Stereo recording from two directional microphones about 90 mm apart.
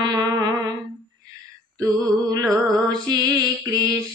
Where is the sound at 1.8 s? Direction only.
45° right (ahead or behind).